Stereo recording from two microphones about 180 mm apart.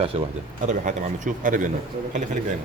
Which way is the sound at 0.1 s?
30° right (ahead or behind).